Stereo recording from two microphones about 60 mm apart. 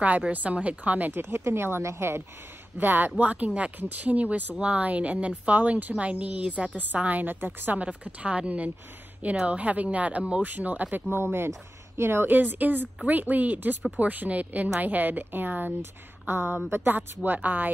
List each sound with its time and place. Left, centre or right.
0.3 s a woman's voice: right
1.3 s speech: right
2.8 s a woman's voice: right